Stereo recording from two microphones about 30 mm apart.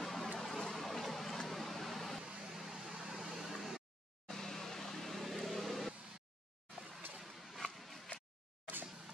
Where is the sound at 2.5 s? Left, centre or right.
Centre.